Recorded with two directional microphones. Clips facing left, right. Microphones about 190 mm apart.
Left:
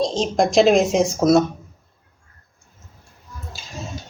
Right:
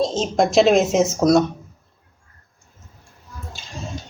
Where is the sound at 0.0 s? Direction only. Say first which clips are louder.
Even; 5° right (ahead or behind).